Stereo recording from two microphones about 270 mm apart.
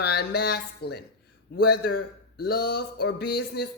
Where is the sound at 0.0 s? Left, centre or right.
Left.